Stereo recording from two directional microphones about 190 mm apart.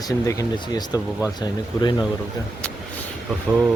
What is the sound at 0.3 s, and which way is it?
Speech, 20° left (ahead or behind).